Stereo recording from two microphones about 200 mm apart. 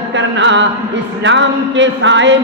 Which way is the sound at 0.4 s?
65° right (ahead or behind).